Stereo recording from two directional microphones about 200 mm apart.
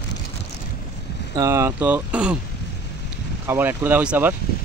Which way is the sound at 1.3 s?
15° right (ahead or behind).